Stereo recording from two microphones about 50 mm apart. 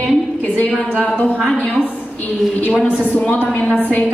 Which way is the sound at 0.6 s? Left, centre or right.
Left.